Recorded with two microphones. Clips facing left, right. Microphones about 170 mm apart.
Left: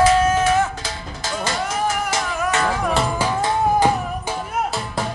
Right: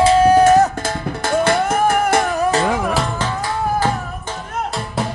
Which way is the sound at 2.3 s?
35° right (ahead or behind).